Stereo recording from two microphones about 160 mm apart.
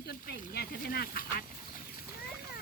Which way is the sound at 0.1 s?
85° left.